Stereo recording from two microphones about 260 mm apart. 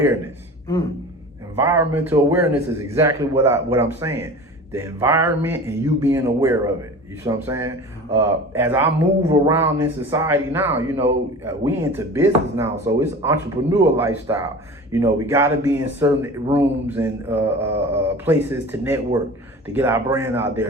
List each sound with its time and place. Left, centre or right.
1.5 s speech: centre